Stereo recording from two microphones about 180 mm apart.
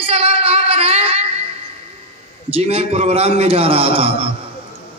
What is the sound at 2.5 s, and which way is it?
A man's voice, 35° right (ahead or behind).